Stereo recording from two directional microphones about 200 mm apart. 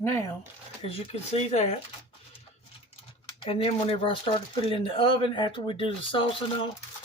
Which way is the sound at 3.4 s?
30° left (ahead or behind).